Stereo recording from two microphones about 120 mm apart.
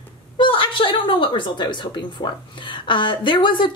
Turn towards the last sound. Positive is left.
turn(degrees=40)  # may be behind; listen again after turning